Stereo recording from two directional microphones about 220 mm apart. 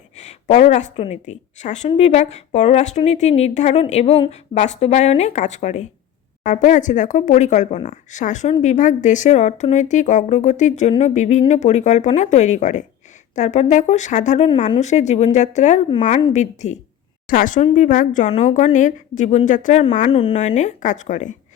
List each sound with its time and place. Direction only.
0.2 s a woman's voice: 30° left (ahead or behind)